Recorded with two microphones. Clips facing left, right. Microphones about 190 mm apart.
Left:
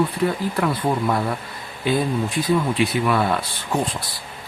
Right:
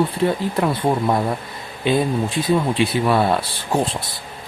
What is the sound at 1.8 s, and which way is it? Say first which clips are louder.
Speech: right 2 dB; 25° right (ahead or behind).